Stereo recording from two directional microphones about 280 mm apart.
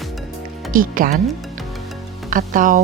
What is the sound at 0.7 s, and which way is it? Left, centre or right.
Speech, right.